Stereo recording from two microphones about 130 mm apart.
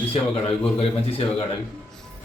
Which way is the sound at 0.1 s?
45° left (ahead or behind).